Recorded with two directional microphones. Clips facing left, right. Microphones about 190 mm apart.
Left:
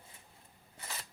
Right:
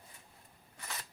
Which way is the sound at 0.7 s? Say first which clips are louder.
Even; 30° left (ahead or behind).